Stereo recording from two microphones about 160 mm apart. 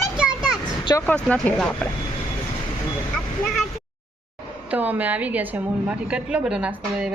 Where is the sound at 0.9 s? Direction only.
20° left (ahead or behind).